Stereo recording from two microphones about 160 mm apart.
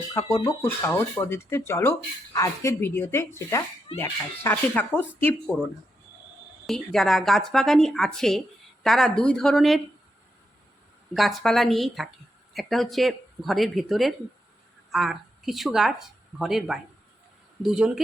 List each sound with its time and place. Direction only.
0.1 s speech: 20° left (ahead or behind)
6.7 s speech: centre (ahead or behind)
11.1 s speech: centre (ahead or behind)